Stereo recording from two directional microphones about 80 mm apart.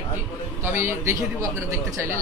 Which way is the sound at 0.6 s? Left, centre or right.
Right.